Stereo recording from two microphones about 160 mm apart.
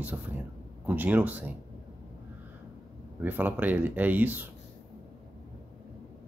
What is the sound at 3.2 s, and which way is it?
Speech, 10° right (ahead or behind).